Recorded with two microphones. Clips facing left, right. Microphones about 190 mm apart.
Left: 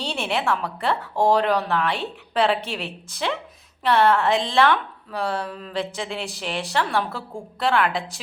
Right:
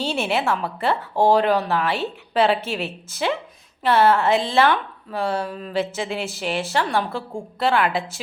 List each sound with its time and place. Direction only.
0.0 s speech: centre (ahead or behind)